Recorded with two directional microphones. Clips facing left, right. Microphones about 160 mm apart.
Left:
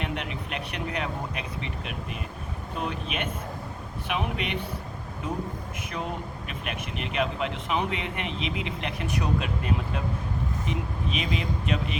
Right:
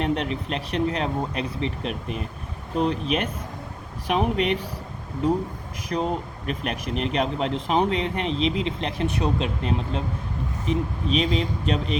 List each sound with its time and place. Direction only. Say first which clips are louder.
0.0 s speech: right 7 dB; 35° right (ahead or behind)
5.9 s speech: right 8 dB; 35° right (ahead or behind)